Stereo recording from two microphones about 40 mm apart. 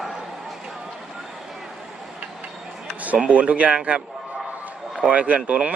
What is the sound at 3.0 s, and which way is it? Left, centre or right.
A man's voice, right.